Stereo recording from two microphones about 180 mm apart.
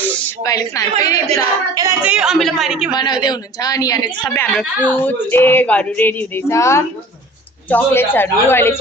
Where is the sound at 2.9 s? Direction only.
25° left (ahead or behind).